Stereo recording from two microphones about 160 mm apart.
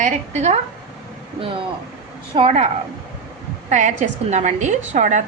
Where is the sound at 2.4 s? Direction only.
40° right (ahead or behind).